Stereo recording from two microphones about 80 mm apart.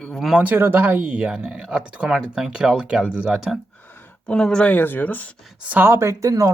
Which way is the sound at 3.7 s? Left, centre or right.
Left.